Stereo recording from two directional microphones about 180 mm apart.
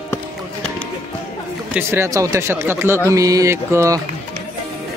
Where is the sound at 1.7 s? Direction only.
15° right (ahead or behind).